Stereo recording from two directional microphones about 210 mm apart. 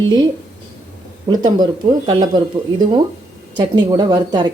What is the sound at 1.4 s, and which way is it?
A woman's voice, 20° right (ahead or behind).